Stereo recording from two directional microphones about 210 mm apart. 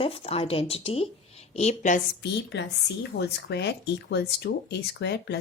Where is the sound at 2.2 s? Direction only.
55° left (ahead or behind).